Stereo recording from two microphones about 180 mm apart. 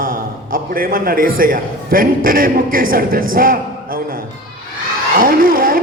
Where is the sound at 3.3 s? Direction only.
55° right (ahead or behind).